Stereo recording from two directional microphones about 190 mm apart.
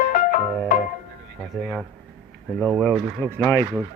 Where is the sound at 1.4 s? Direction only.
Centre (ahead or behind).